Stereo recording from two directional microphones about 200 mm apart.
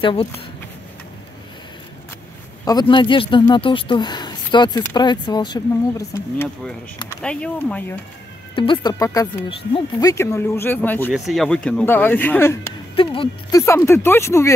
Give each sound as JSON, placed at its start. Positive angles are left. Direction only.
{"t": 0.0, "sound": "speech", "side_deg": 25}
{"t": 2.6, "sound": "speech", "side_deg": 20}
{"t": 8.5, "sound": "speech", "side_deg": 25}
{"t": 11.1, "sound": "speech", "side_deg": 0}
{"t": 12.9, "sound": "speech", "side_deg": 25}